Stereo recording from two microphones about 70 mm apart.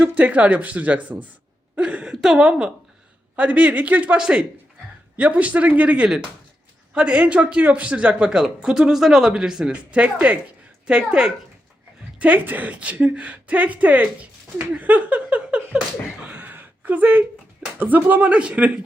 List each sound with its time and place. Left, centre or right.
0.0 s speech: centre
1.7 s a sound: centre
2.2 s a woman's voice: centre
12.2 s speech: right
16.2 s a sound: right
17.7 s speech: right